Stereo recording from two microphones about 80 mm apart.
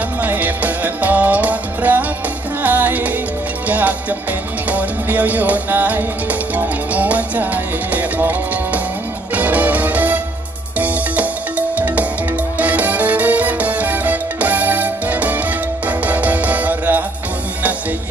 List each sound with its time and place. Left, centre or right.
0.2 s music: right